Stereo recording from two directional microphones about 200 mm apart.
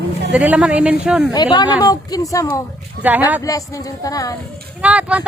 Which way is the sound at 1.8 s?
20° left (ahead or behind).